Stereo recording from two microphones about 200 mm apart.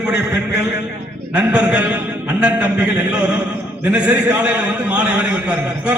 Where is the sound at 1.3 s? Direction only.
5° right (ahead or behind).